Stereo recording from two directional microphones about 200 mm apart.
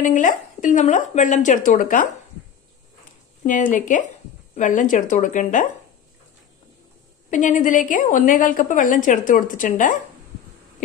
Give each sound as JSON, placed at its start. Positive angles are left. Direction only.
{"t": 0.0, "sound": "a woman's voice", "side_deg": 40}
{"t": 3.4, "sound": "a woman's voice", "side_deg": 40}
{"t": 7.2, "sound": "a woman's voice", "side_deg": 40}